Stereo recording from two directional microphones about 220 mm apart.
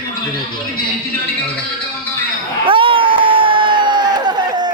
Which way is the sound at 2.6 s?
25° right (ahead or behind).